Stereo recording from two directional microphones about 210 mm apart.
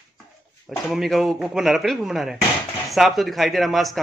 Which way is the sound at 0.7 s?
Centre (ahead or behind).